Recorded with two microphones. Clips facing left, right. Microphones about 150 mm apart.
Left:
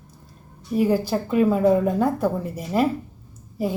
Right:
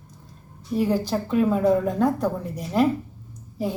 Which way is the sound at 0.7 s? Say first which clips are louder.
Left 2 dB; 5° left (ahead or behind).